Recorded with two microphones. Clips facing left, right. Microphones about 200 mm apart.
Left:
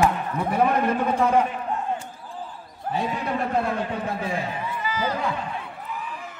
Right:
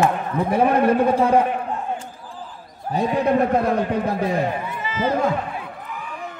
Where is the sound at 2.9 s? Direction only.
40° right (ahead or behind).